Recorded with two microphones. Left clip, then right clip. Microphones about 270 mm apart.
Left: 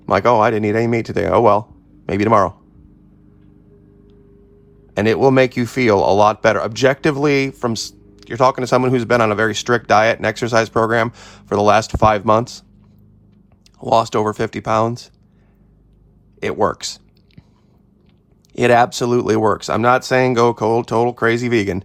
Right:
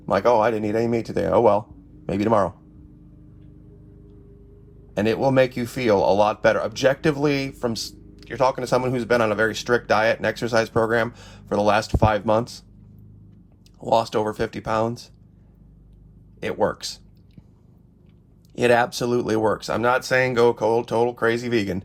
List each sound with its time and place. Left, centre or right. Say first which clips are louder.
0.1 s speech: left 5 dB; left
4.9 s speech: left 6 dB; left
13.9 s speech: left 5 dB; left
16.4 s a sound: left 5 dB; left
18.5 s speech: left 6 dB; left